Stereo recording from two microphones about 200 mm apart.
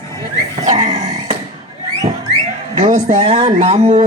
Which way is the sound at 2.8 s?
40° right (ahead or behind).